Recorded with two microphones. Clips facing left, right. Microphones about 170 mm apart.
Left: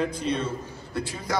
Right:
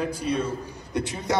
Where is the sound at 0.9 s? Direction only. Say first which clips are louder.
Right 4 dB; 20° right (ahead or behind).